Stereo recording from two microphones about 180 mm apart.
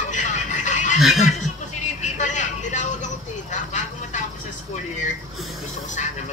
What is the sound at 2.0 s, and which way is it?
Vehicle, 40° left (ahead or behind).